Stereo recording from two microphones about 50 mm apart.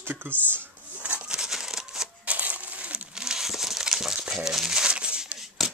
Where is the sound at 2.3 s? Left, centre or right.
Right.